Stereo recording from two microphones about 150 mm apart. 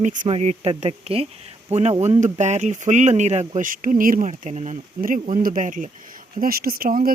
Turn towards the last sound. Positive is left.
turn(degrees=-70)  # may be behind; listen again after turning